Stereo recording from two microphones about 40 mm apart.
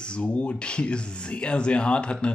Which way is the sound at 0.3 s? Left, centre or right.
Left.